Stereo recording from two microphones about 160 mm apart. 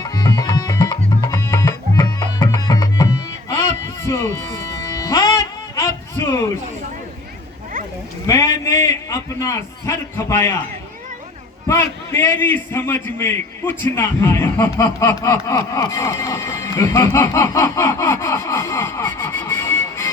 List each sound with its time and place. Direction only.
0.0 s music: 25° left (ahead or behind)
8.3 s a sound: 20° left (ahead or behind)
9.0 s a man's voice: 20° left (ahead or behind)
11.7 s a man's voice: 15° left (ahead or behind)